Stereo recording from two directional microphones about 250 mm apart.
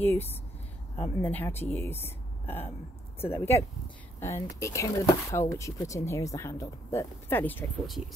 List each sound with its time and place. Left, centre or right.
0.0 s speech: centre